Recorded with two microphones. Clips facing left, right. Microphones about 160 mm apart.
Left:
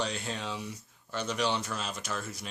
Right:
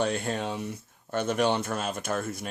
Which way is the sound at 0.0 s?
55° right (ahead or behind).